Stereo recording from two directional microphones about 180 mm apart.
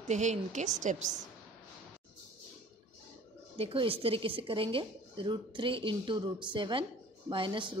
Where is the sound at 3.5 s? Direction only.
30° right (ahead or behind).